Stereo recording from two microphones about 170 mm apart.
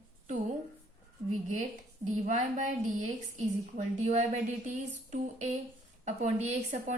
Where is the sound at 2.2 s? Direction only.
45° right (ahead or behind).